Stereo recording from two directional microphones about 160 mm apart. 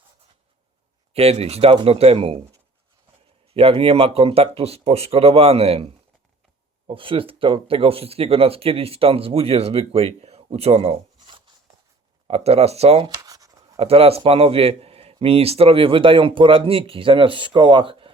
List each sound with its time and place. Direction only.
1.1 s speech: 40° right (ahead or behind)
3.5 s speech: 35° right (ahead or behind)
13.1 s scratch: 25° right (ahead or behind)
13.7 s speech: 35° right (ahead or behind)